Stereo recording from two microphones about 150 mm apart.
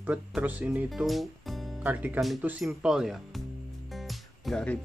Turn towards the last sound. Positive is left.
turn(degrees=5)  # may be behind; listen again after turning